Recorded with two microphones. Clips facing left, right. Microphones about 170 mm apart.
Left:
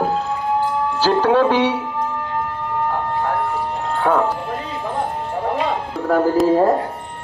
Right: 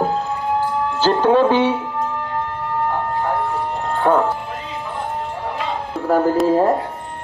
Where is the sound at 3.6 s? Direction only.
5° left (ahead or behind).